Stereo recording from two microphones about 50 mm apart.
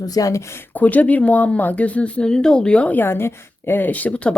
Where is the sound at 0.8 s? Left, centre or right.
Left.